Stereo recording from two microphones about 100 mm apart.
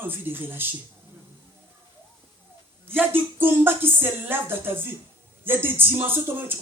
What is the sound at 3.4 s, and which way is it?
Speech, 20° right (ahead or behind).